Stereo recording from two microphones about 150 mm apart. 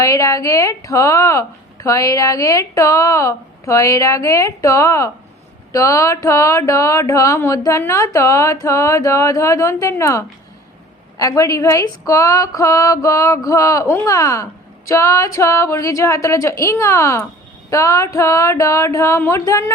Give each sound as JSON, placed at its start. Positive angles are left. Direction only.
{"t": 0.0, "sound": "a woman's voice", "side_deg": 20}